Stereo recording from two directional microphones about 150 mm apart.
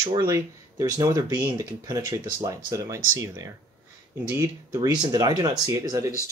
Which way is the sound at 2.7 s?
20° right (ahead or behind).